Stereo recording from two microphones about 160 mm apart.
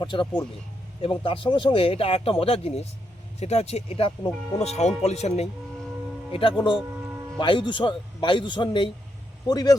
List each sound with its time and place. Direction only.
0.0 s a man's voice: 30° left (ahead or behind)